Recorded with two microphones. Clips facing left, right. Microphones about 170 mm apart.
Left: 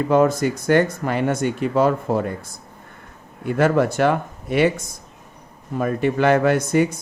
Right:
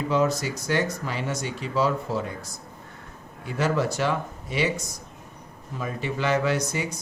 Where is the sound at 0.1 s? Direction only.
55° left (ahead or behind).